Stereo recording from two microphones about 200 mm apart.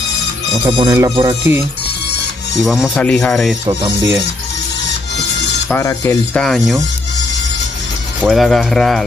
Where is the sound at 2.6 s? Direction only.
Centre (ahead or behind).